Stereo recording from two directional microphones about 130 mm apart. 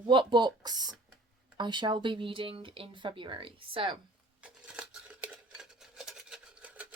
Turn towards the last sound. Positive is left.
turn(degrees=-10)  # may be behind; listen again after turning